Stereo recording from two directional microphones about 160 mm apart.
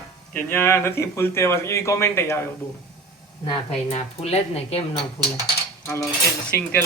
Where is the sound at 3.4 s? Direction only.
40° left (ahead or behind).